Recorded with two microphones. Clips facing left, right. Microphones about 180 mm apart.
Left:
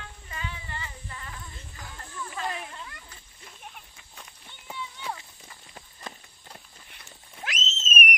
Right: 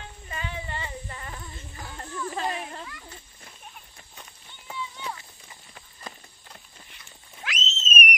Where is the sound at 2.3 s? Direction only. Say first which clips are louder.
Right 2 dB; 30° right (ahead or behind).